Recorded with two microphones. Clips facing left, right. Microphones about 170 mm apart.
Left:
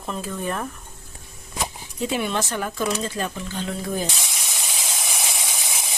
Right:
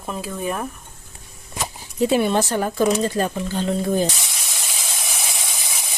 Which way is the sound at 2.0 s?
35° right (ahead or behind).